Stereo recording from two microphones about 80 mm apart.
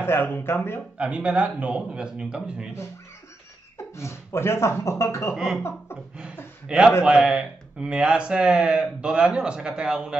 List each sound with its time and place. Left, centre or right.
0.0 s speech: left
0.9 s speech: centre
3.7 s speech: left
5.3 s speech: centre
5.6 s speech: left
7.0 s speech: centre